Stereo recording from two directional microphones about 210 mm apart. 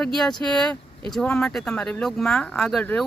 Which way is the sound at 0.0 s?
Centre (ahead or behind).